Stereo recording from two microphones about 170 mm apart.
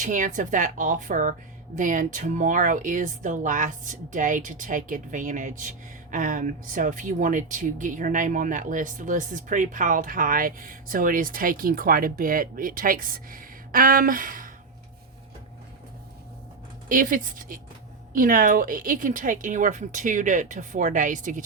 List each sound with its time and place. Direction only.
0.0 s speech: 50° right (ahead or behind)
16.9 s speech: 55° right (ahead or behind)